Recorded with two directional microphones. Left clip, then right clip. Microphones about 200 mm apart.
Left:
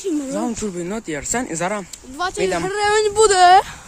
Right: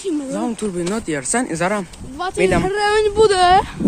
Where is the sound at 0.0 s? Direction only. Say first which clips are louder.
Even; 45° left (ahead or behind).